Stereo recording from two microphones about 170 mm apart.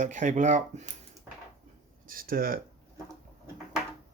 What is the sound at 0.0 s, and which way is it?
Speech, 45° right (ahead or behind).